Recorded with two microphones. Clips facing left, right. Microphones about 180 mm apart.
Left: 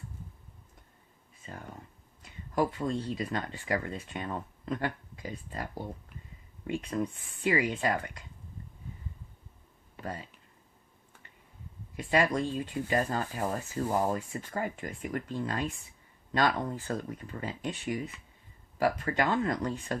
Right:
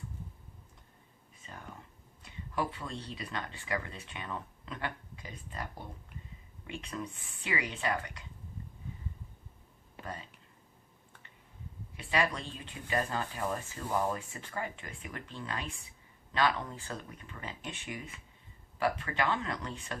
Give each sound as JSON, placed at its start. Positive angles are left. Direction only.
{"t": 2.6, "sound": "speech", "side_deg": 45}
{"t": 6.7, "sound": "speech", "side_deg": 45}
{"t": 11.9, "sound": "speech", "side_deg": 45}